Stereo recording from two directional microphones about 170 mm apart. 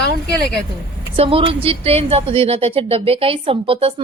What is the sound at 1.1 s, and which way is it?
A woman's voice, 35° right (ahead or behind).